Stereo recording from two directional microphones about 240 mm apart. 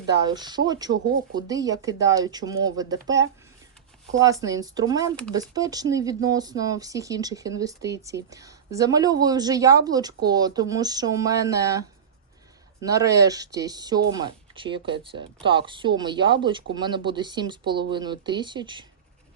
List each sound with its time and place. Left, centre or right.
0.3 s speech: centre